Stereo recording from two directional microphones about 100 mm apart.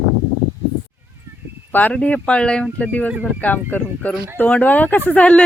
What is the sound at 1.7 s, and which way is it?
Speech, 15° left (ahead or behind).